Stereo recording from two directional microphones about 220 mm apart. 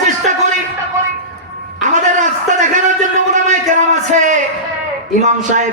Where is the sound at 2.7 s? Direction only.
35° right (ahead or behind).